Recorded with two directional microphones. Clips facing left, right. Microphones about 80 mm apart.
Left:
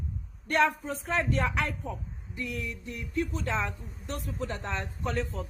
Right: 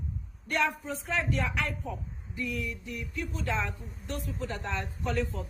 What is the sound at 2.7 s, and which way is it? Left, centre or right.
A man's voice, left.